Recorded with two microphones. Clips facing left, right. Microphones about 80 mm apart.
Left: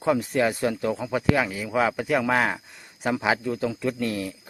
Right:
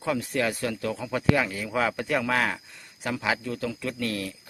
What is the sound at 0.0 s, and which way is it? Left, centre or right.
Speech, left.